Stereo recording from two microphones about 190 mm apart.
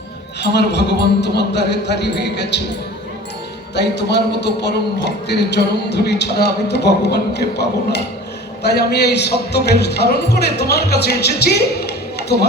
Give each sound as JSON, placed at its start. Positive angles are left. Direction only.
{"t": 0.5, "sound": "speech", "side_deg": 65}
{"t": 3.8, "sound": "a man's voice", "side_deg": 65}